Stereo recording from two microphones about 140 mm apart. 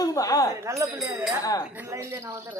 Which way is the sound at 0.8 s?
25° right (ahead or behind).